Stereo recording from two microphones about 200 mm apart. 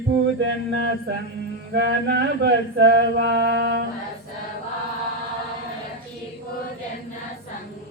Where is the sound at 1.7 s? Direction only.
55° right (ahead or behind).